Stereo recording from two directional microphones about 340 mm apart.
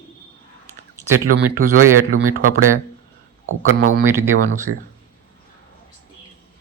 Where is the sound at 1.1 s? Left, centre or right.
Right.